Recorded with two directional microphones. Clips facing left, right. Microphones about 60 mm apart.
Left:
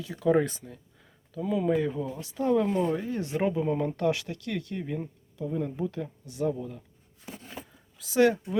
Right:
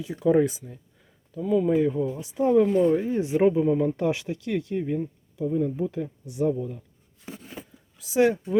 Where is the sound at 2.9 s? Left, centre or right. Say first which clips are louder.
Right 6 dB; centre.